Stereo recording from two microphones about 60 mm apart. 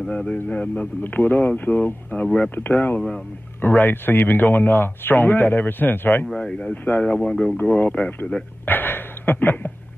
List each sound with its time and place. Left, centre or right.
0.1 s speech: centre
6.2 s speech: centre
6.7 s speech: left
7.1 s speech: centre
8.6 s a sound: left